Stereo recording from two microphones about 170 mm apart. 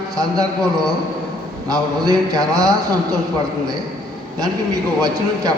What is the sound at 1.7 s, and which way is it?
Speech, 20° right (ahead or behind).